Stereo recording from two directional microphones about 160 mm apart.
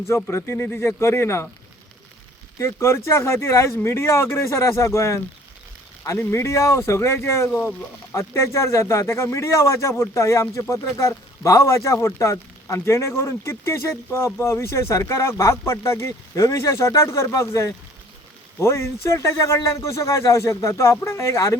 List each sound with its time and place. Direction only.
0.1 s speech: 15° left (ahead or behind)
2.6 s speech: 15° left (ahead or behind)